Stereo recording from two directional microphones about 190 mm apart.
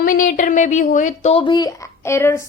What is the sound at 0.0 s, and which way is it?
Speech, 45° left (ahead or behind).